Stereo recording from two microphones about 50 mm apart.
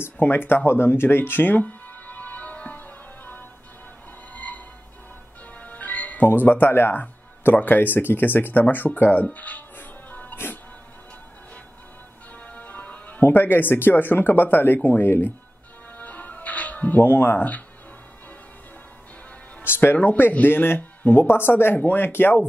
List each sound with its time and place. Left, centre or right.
0.0 s speech: left
0.7 s music: left
7.4 s speech: left
10.3 s music: left
12.4 s music: left
13.2 s speech: left
16.0 s music: left
17.0 s speech: left
19.6 s speech: left